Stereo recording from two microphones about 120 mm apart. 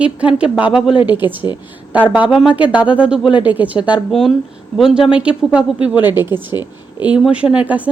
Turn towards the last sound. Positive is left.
turn(degrees=-10)  # may be behind; listen again after turning